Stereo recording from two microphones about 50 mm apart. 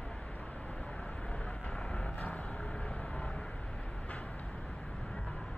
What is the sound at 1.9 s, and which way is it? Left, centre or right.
Vehicle, left.